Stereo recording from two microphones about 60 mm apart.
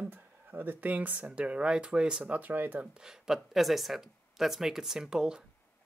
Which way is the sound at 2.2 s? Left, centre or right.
Right.